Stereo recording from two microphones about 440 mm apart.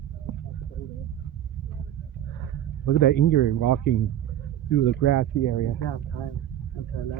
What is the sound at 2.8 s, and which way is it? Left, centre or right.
Speech, left.